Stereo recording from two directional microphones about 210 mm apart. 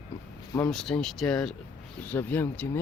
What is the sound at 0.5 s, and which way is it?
Speech, 5° left (ahead or behind).